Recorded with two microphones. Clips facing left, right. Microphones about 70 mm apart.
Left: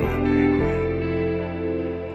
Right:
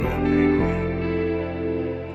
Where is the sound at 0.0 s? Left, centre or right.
Centre.